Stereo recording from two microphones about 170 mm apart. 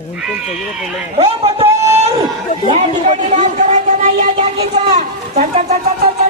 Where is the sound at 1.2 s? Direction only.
35° right (ahead or behind).